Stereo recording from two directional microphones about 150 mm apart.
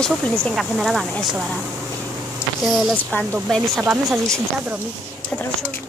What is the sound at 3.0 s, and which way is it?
Speech, 10° left (ahead or behind).